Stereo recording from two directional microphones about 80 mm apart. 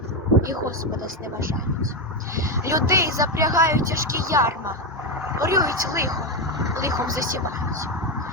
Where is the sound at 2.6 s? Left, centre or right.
Right.